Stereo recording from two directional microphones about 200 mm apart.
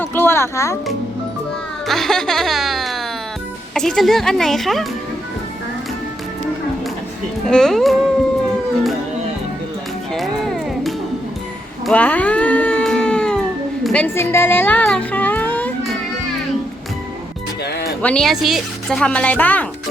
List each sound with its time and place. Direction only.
0.0 s music: 10° left (ahead or behind)
1.9 s music: centre (ahead or behind)
3.8 s a woman's voice: centre (ahead or behind)
7.4 s a woman's voice: centre (ahead or behind)
10.1 s music: centre (ahead or behind)
11.9 s cat: 5° left (ahead or behind)
13.8 s a sound: 5° left (ahead or behind)
18.0 s a woman's voice: 5° left (ahead or behind)